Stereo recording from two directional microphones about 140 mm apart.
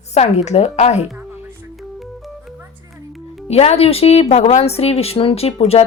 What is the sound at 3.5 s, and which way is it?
A woman's voice, 45° left (ahead or behind).